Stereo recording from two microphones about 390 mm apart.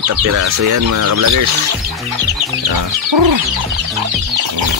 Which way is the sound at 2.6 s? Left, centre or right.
Right.